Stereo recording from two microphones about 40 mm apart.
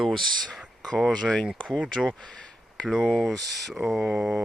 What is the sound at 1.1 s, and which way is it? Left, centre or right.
Speech, left.